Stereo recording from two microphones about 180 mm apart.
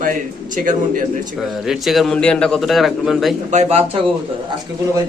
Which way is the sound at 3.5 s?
40° right (ahead or behind).